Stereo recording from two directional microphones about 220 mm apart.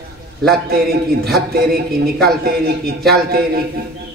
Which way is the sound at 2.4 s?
45° right (ahead or behind).